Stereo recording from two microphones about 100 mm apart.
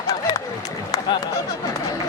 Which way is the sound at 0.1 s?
35° left (ahead or behind).